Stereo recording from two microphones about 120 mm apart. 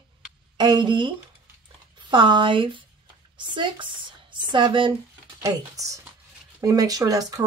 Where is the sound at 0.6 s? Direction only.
40° right (ahead or behind).